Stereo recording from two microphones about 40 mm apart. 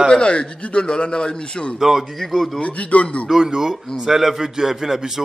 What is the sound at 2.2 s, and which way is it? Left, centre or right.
Speech, centre.